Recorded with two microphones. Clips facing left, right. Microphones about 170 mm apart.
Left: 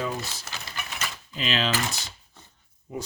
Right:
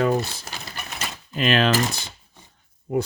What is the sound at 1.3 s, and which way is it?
Speech, 55° right (ahead or behind).